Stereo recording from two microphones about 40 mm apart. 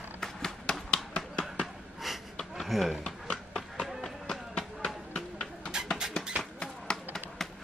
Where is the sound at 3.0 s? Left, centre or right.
Centre.